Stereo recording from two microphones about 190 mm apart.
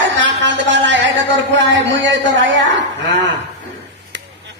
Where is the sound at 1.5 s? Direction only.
75° right (ahead or behind).